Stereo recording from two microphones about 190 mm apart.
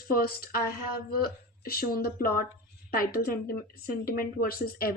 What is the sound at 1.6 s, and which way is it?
A woman's voice, 50° left (ahead or behind).